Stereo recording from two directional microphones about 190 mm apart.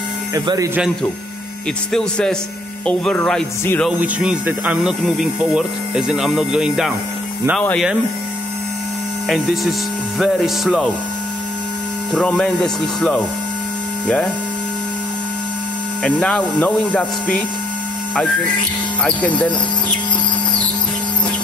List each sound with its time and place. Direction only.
0.3 s speech: 15° right (ahead or behind)
1.9 s speech: 5° left (ahead or behind)
4.0 s speech: 5° right (ahead or behind)
9.3 s speech: centre (ahead or behind)
12.1 s speech: 5° left (ahead or behind)
16.0 s speech: 5° left (ahead or behind)
19.0 s speech: 5° left (ahead or behind)